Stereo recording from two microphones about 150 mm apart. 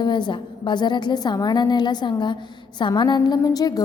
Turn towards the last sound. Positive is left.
turn(degrees=25)  # may be behind; listen again after turning